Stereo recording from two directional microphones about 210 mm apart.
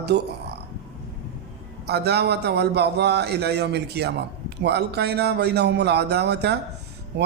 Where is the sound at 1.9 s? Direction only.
50° right (ahead or behind).